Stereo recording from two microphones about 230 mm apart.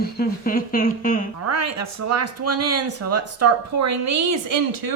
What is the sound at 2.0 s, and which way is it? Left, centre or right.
Speech, right.